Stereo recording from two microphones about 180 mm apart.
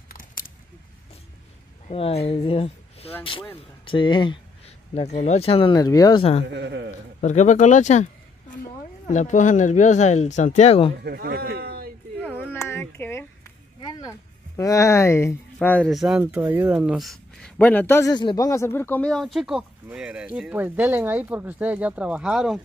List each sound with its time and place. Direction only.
0.1 s scissors: 50° left (ahead or behind)
1.9 s speech: 35° left (ahead or behind)
4.9 s speech: 40° left (ahead or behind); by 6.2 s 20° left (ahead or behind)
6.5 s a man's voice: 70° right (ahead or behind)
7.2 s speech: 40° left (ahead or behind)
11.1 s speech: 55° right (ahead or behind)
12.4 s a sound: 15° left (ahead or behind)
14.6 s speech: 15° left (ahead or behind); by 22.6 s 5° right (ahead or behind)